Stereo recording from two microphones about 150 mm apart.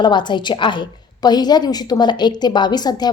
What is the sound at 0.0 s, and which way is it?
A woman's voice, 30° left (ahead or behind).